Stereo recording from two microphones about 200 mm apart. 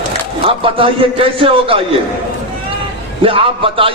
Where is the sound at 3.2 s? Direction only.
25° right (ahead or behind).